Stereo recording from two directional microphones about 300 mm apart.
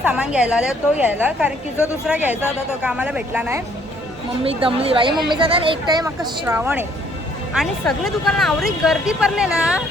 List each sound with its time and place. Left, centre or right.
0.0 s speech: centre
4.4 s speech: centre